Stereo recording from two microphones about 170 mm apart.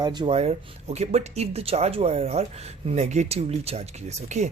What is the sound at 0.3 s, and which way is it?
Speech, 40° right (ahead or behind).